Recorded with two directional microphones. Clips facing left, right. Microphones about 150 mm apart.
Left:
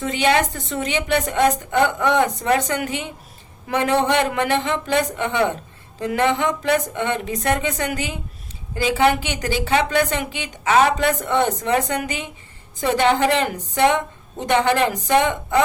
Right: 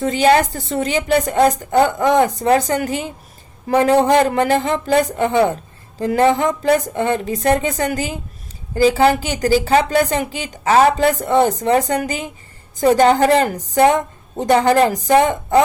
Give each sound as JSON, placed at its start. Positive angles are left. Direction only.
{"t": 0.0, "sound": "a woman's voice", "side_deg": -35}